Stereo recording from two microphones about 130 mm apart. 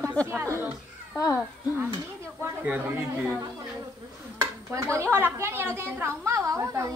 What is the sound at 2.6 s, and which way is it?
Speech, 15° right (ahead or behind).